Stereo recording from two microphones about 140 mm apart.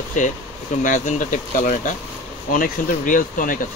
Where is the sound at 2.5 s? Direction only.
80° left.